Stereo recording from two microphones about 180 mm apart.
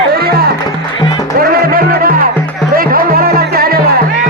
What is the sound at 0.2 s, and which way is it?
Music, 60° right (ahead or behind).